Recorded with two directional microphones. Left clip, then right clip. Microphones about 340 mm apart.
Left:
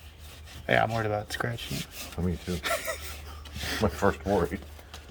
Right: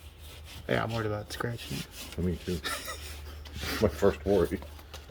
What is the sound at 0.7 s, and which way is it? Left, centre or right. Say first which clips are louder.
Speech: left 6 dB; centre.